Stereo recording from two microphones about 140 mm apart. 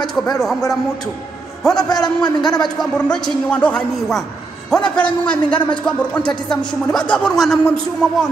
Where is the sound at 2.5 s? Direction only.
5° left (ahead or behind).